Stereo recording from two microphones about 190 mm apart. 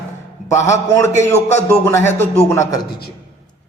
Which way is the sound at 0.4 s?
15° left (ahead or behind).